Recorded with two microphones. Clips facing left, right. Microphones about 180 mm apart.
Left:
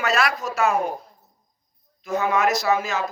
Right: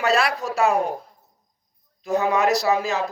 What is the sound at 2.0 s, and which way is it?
A man's voice, 35° right (ahead or behind).